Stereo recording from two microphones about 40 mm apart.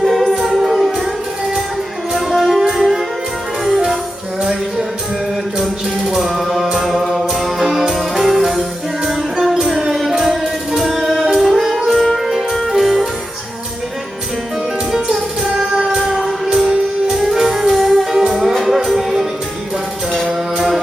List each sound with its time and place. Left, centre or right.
0.0 s music: centre
2.1 s music: centre
4.4 s music: centre
6.1 s music: centre
14.9 s music: centre
16.0 s music: centre
16.5 s music: centre
20.1 s mantra: centre